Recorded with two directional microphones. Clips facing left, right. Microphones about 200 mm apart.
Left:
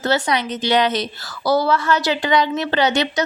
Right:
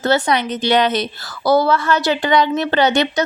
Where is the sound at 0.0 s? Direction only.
55° right (ahead or behind).